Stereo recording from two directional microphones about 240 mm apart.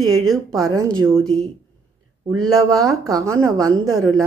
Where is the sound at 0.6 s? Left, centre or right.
Centre.